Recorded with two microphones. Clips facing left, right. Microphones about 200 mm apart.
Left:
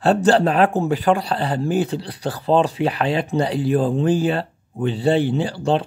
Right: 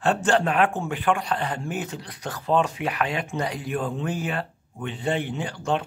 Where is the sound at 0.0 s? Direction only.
35° left (ahead or behind).